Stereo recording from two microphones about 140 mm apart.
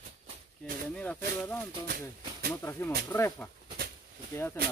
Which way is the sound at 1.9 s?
90° right.